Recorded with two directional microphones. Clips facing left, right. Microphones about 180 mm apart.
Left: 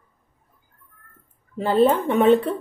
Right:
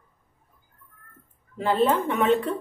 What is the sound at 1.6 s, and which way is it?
Speech, 35° left (ahead or behind).